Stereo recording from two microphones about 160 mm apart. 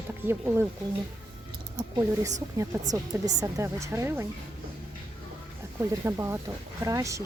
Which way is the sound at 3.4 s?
20° right (ahead or behind).